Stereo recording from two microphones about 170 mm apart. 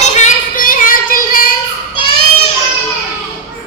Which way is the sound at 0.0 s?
45° left (ahead or behind).